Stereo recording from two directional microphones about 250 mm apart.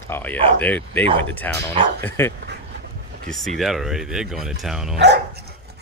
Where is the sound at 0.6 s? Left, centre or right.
Centre.